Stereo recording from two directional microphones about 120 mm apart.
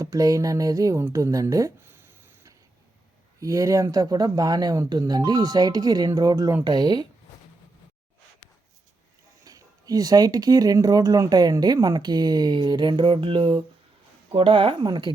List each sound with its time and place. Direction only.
0.0 s speech: 30° right (ahead or behind)
9.4 s speech: 30° right (ahead or behind)